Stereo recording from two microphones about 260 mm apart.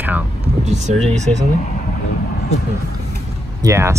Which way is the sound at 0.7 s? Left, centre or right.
Right.